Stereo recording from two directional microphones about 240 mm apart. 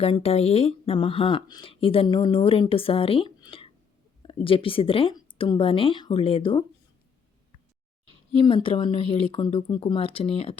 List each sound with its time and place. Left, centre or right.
0.0 s speech: left
8.3 s speech: left